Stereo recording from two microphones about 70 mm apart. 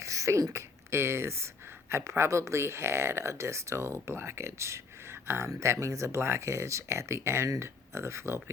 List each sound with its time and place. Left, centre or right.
0.0 s speech: right